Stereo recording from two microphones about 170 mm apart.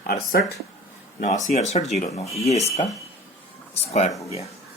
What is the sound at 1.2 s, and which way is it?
Speech, 45° left (ahead or behind).